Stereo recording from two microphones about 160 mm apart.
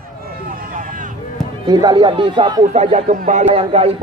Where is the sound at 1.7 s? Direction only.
25° right (ahead or behind).